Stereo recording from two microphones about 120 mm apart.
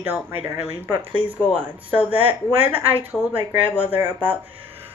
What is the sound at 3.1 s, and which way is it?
Speech, 5° left (ahead or behind).